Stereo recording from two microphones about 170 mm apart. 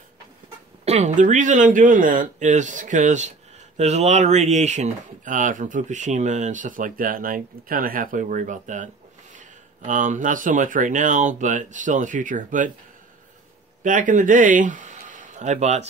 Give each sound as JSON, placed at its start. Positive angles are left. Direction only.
{"t": 0.8, "sound": "speech", "side_deg": -45}
{"t": 13.8, "sound": "speech", "side_deg": -50}